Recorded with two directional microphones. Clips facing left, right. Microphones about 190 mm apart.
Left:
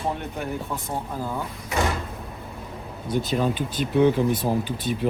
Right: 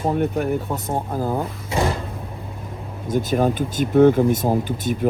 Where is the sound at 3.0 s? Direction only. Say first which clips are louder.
Right 4 dB; 45° right (ahead or behind).